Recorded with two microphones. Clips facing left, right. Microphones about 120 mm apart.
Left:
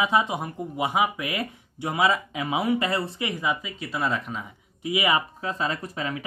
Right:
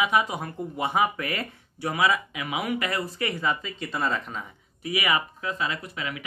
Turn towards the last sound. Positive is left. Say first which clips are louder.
# left 3 dB
turn(degrees=35)  # may be behind; listen again after turning